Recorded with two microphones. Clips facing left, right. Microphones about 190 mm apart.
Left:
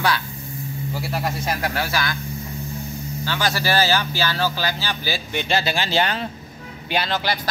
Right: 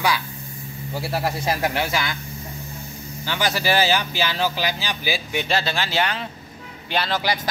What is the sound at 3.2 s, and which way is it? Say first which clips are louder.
Speech: right 1 dB; 20° right (ahead or behind).